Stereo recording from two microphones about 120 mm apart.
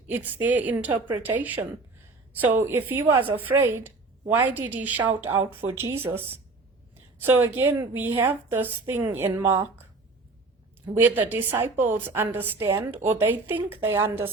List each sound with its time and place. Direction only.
0.1 s a woman's voice: 15° right (ahead or behind)
7.3 s a woman's voice: 20° right (ahead or behind)
10.9 s a woman's voice: 15° right (ahead or behind)